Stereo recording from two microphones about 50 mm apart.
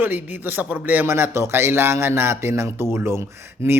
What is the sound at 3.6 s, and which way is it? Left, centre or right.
Speech, right.